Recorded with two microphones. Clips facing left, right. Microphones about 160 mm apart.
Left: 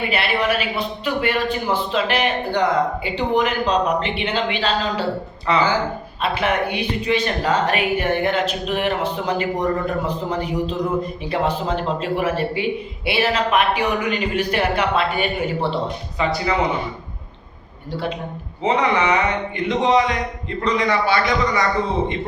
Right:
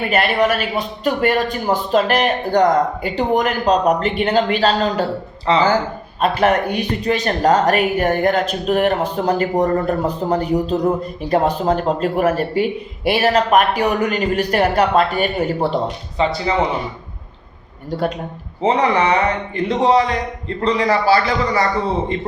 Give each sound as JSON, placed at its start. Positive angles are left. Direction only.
{"t": 0.1, "sound": "speech", "side_deg": -45}
{"t": 5.5, "sound": "speech", "side_deg": -30}
{"t": 6.1, "sound": "speech", "side_deg": -40}
{"t": 16.1, "sound": "speech", "side_deg": -25}
{"t": 18.6, "sound": "speech", "side_deg": -35}